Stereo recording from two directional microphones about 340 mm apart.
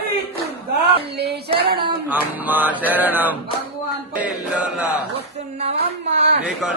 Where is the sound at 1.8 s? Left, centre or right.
Centre.